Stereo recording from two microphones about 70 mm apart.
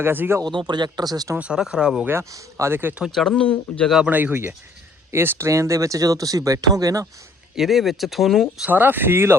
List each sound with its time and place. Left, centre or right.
0.0 s speech: right
0.7 s speech: right
1.5 s speech: centre
2.3 s speech: right
3.1 s speech: centre
4.1 s speech: right
7.5 s speech: centre
8.6 s speech: right